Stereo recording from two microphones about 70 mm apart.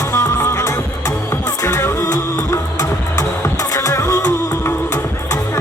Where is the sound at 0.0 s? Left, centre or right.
Left.